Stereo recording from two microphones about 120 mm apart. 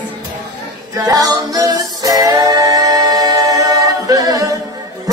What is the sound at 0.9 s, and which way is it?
Music, 30° right (ahead or behind).